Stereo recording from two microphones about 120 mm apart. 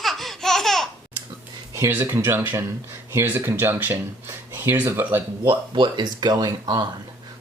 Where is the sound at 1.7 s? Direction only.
20° right (ahead or behind).